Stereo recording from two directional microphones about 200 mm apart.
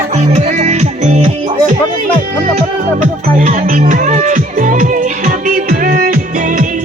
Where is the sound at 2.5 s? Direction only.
40° right (ahead or behind).